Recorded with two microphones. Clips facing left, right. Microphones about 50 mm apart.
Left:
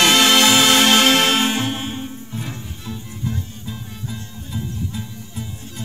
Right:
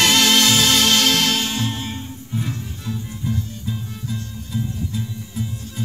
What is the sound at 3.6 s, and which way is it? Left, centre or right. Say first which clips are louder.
Music: right 3 dB; centre.